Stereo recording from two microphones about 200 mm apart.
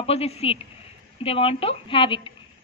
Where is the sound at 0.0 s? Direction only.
30° left (ahead or behind).